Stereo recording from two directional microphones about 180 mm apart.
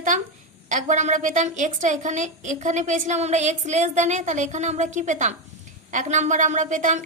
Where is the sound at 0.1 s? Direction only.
45° right (ahead or behind).